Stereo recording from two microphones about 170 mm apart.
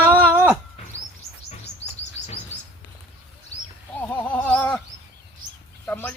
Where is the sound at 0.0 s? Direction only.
10° right (ahead or behind).